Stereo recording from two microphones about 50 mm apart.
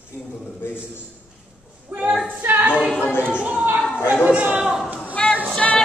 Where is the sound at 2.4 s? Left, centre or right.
Right.